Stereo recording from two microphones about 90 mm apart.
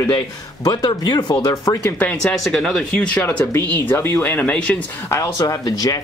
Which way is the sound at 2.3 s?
5° left (ahead or behind).